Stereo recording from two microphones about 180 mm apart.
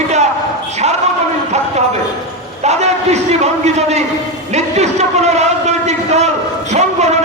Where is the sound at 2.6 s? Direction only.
40° right (ahead or behind).